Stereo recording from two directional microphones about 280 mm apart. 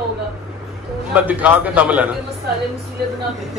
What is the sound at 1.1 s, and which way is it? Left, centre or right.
A man's voice, centre.